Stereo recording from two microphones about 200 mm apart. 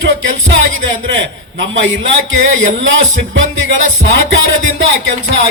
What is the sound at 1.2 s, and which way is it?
Speech, 65° right (ahead or behind).